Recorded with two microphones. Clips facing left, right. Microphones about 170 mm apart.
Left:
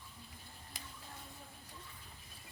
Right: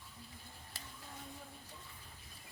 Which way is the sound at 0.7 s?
15° left (ahead or behind).